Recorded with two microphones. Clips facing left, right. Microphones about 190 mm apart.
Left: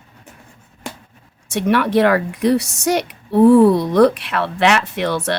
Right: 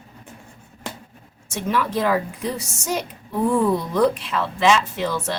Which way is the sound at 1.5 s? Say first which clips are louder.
Left 7 dB; 70° left (ahead or behind).